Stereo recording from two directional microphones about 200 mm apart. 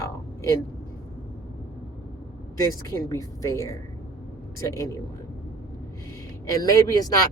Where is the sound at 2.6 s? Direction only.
15° left (ahead or behind).